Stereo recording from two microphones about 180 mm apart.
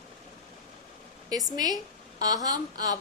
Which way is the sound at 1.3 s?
20° right (ahead or behind).